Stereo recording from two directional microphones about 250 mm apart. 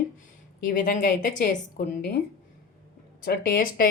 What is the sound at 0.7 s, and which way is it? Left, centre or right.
Speech, left.